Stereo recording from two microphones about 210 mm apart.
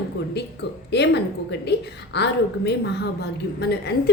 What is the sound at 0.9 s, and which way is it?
A woman's voice, 55° left (ahead or behind).